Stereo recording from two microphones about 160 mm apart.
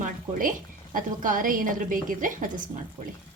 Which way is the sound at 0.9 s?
55° right (ahead or behind).